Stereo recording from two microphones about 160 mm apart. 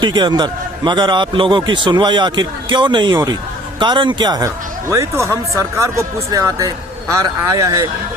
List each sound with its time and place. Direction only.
0.0 s speech: 25° right (ahead or behind)